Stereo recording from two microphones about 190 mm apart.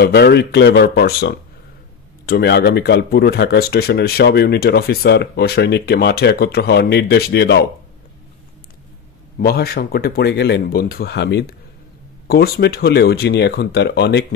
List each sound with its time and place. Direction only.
0.0 s speech: 60° left (ahead or behind)
9.4 s speech: 55° left (ahead or behind)